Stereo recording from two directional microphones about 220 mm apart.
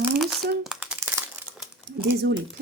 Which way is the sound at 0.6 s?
5° right (ahead or behind).